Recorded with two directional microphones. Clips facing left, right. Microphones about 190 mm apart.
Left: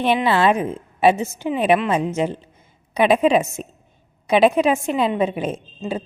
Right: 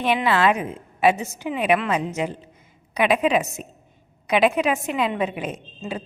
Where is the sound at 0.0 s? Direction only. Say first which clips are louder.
Left 3 dB; 30° left (ahead or behind).